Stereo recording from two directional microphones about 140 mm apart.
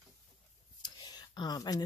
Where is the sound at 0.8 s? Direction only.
30° left (ahead or behind).